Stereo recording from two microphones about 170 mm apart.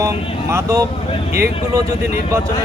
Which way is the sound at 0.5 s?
15° right (ahead or behind).